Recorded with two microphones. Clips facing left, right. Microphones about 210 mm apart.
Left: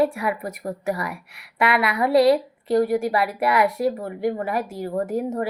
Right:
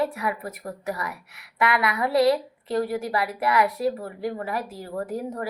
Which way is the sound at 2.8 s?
25° left (ahead or behind).